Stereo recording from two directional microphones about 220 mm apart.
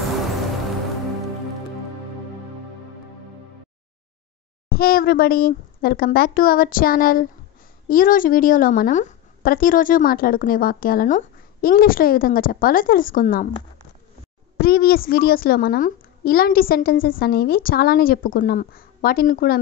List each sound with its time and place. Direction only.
4.6 s a child's voice: 45° left (ahead or behind)
14.6 s a woman's voice: 45° left (ahead or behind)